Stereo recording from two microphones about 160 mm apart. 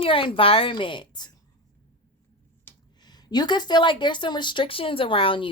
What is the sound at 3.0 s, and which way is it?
Speech, 25° left (ahead or behind).